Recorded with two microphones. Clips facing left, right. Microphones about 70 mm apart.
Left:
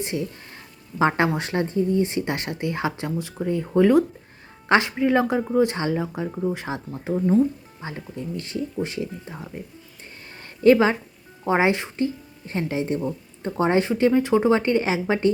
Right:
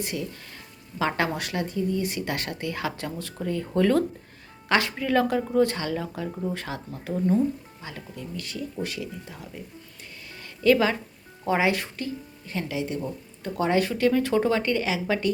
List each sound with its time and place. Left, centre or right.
0.0 s speech: left